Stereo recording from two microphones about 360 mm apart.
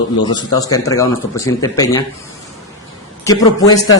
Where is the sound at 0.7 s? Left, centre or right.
Centre.